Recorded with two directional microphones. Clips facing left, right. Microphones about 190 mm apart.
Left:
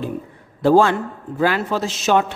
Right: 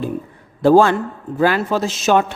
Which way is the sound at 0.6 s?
45° right (ahead or behind).